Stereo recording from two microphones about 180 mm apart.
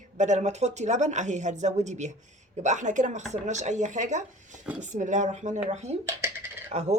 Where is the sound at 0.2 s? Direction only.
40° right (ahead or behind).